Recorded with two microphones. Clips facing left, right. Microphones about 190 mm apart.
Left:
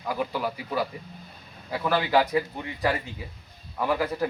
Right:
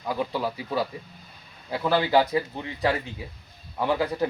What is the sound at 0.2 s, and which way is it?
Speech, 25° right (ahead or behind).